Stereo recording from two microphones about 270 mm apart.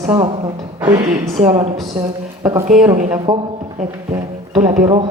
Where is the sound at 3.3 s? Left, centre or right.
Centre.